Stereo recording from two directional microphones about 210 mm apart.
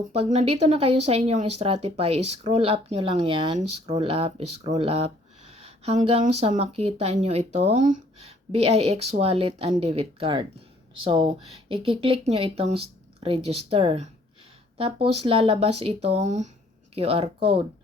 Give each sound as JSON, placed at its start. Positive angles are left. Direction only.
{"t": 0.1, "sound": "speech", "side_deg": -30}